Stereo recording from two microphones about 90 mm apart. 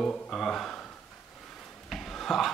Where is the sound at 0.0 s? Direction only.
5° left (ahead or behind).